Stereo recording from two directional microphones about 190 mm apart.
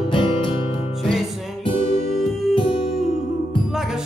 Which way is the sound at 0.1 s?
25° left (ahead or behind).